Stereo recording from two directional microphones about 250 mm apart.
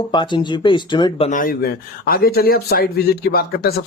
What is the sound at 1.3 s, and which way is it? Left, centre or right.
Speech, left.